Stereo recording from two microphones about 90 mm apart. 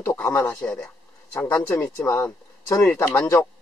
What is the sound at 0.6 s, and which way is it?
Speech, 15° left (ahead or behind).